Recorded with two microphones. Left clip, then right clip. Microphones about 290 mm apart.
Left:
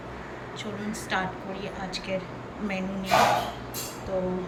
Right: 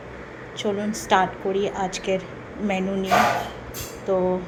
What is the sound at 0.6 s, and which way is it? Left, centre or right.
A woman's voice, centre.